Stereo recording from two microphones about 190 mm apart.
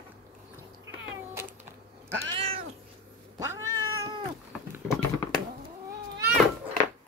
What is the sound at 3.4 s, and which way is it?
Cat, 15° right (ahead or behind).